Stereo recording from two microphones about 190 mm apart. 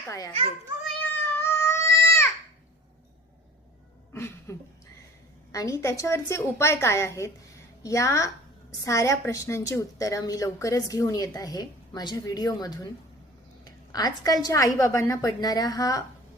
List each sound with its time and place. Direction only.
0.1 s a woman's voice: 15° left (ahead or behind)
1.4 s baby cry: 15° left (ahead or behind)
4.1 s a sound: 15° left (ahead or behind)
5.5 s a woman's voice: 15° left (ahead or behind)
13.7 s a sound: 20° left (ahead or behind)
14.4 s a woman's voice: 15° left (ahead or behind)